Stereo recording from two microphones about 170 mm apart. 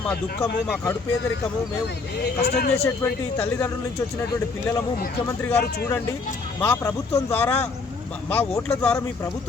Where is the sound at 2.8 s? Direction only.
10° left (ahead or behind).